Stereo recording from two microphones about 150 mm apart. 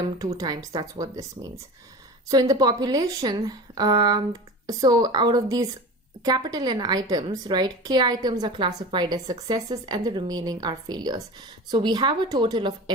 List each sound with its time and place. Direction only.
0.3 s a woman's voice: 25° right (ahead or behind)